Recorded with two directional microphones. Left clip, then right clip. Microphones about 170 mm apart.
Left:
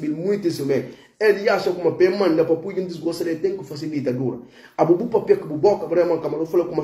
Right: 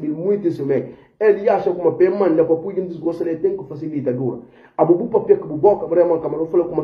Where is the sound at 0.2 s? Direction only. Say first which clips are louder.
Right 4 dB; 15° left (ahead or behind).